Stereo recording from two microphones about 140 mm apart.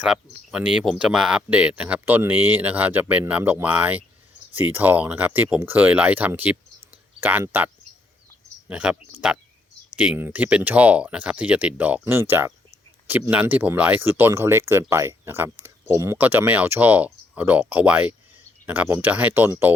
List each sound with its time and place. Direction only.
0.0 s speech: 5° right (ahead or behind)
8.7 s speech: 10° right (ahead or behind)